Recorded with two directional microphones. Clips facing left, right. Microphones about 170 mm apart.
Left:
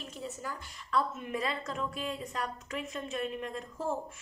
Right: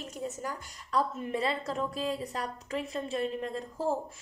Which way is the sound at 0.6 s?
40° right (ahead or behind).